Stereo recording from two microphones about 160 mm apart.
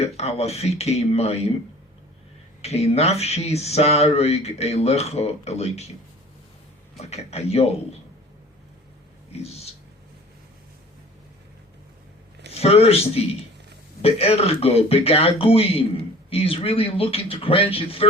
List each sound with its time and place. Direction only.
0.2 s speech: 40° left (ahead or behind)
2.6 s speech: 40° left (ahead or behind)
6.9 s speech: 40° left (ahead or behind)
12.5 s speech: 40° left (ahead or behind)